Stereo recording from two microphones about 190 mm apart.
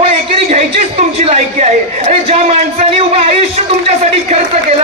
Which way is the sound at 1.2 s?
35° right (ahead or behind).